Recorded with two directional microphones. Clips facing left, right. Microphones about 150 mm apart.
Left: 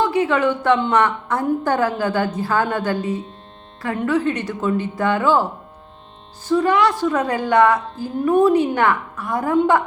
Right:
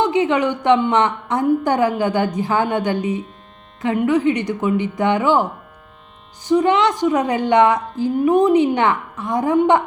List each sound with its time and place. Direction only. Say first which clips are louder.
0.0 s a woman's voice: right 1 dB; 20° right (ahead or behind)